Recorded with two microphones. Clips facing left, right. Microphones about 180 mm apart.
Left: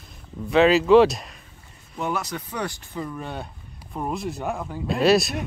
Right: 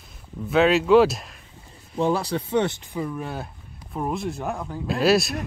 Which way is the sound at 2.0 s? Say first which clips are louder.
Right 5 dB; 30° right (ahead or behind).